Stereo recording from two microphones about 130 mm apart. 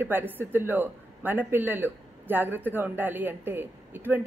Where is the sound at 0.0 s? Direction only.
15° right (ahead or behind).